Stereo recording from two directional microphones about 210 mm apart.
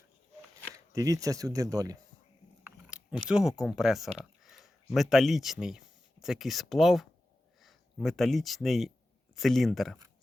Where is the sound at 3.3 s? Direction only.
5° right (ahead or behind).